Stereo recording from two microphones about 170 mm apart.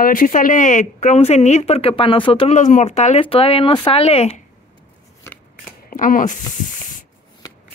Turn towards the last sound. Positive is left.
turn(degrees=50)  # may be behind; listen again after turning